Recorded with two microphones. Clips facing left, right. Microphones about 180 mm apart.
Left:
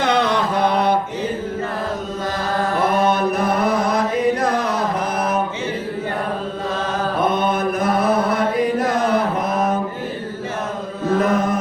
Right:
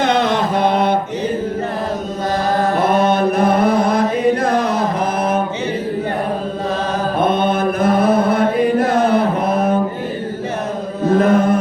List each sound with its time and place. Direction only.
0.3 s mantra: 25° right (ahead or behind)
2.7 s chant: 25° right (ahead or behind)
3.5 s music: 30° right (ahead or behind)
4.5 s a sound: 25° right (ahead or behind)
7.2 s mantra: 25° right (ahead or behind)
9.0 s chant: 30° right (ahead or behind)
11.1 s chant: 30° right (ahead or behind)